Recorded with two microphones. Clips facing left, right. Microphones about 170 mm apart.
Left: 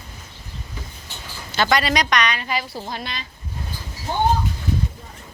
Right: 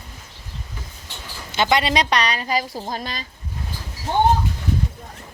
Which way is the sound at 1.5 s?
20° right (ahead or behind).